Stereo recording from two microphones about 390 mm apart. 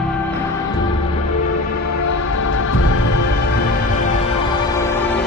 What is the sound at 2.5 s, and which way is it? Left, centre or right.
Music, left.